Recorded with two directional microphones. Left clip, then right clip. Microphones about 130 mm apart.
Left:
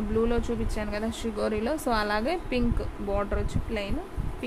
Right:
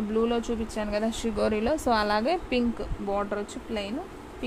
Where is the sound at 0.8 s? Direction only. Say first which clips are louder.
Right 3 dB; 30° right (ahead or behind).